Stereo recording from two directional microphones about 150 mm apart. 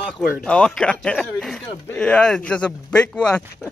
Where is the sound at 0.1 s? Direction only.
5° left (ahead or behind).